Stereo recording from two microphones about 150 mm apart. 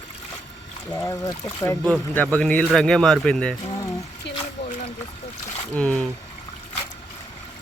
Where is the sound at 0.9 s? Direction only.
25° left (ahead or behind).